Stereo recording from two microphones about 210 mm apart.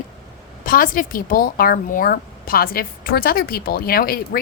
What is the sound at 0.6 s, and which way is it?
Speech, 40° left (ahead or behind).